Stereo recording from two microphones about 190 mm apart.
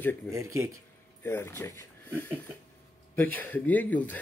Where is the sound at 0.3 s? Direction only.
15° right (ahead or behind).